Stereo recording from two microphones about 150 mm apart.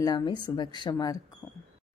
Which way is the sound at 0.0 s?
25° left (ahead or behind).